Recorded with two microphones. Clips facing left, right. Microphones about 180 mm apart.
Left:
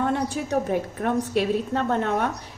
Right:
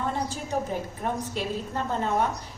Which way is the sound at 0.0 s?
65° left (ahead or behind).